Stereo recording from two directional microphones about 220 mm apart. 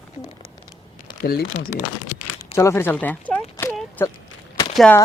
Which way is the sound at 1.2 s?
45° left (ahead or behind).